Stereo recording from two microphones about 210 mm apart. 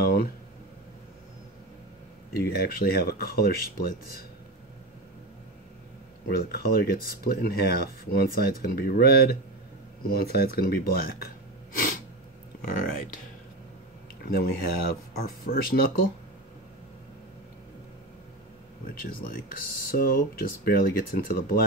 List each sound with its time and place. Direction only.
0.0 s a sound: 45° left (ahead or behind)
2.3 s speech: 50° left (ahead or behind)
6.2 s speech: 45° left (ahead or behind)
14.2 s speech: 45° left (ahead or behind)
18.9 s speech: 45° left (ahead or behind)